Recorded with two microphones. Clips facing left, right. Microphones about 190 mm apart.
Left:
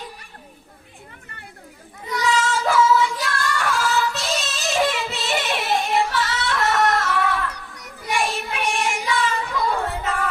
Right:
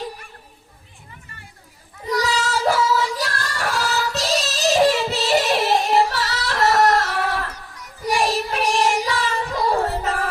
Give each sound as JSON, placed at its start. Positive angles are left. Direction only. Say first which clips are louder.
{"t": 2.0, "sound": "child singing", "louder": "even", "side_deg": -35}